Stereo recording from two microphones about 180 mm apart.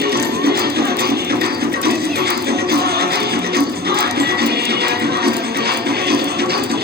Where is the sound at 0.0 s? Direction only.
60° right (ahead or behind).